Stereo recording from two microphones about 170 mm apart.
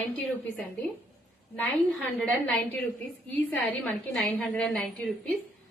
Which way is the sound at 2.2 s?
10° left (ahead or behind).